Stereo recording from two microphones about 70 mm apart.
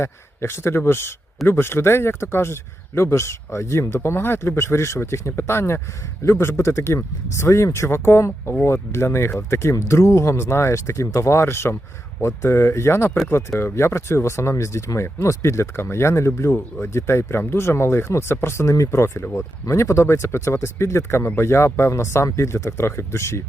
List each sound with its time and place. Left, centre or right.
0.0 s speech: left